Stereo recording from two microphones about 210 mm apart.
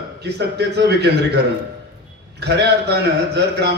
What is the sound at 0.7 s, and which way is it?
Speech, 50° right (ahead or behind).